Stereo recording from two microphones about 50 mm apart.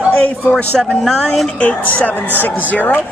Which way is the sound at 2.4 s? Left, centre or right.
Left.